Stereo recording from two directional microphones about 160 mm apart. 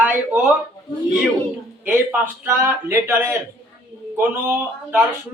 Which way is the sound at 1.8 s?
10° right (ahead or behind).